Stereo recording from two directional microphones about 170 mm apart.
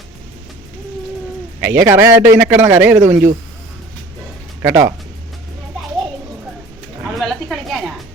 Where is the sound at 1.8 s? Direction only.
15° right (ahead or behind).